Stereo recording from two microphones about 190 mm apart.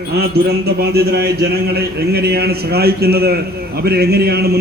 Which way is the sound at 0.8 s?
55° right (ahead or behind).